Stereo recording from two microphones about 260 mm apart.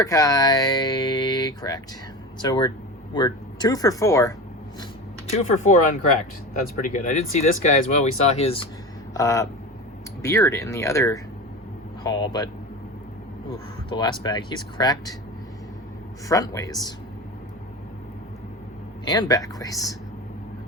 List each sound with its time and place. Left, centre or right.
0.0 s speech: centre
5.3 s speech: left
9.1 s speech: centre
13.9 s speech: centre
16.3 s speech: centre
19.0 s speech: centre